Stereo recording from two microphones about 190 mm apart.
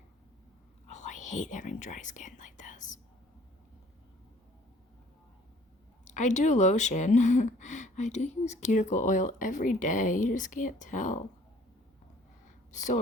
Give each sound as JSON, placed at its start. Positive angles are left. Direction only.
{"t": 0.9, "sound": "speech", "side_deg": 40}
{"t": 6.1, "sound": "speech", "side_deg": 40}
{"t": 12.7, "sound": "speech", "side_deg": 40}